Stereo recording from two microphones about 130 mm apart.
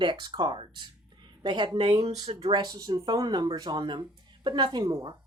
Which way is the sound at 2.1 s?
60° right (ahead or behind).